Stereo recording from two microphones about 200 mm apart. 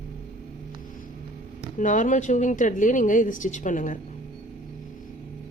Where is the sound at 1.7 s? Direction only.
40° left (ahead or behind).